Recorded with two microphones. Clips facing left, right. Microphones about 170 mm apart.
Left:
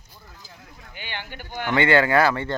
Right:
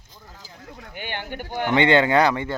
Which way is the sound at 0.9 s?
50° right (ahead or behind).